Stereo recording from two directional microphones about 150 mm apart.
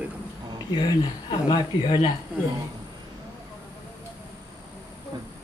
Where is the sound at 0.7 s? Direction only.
30° left (ahead or behind).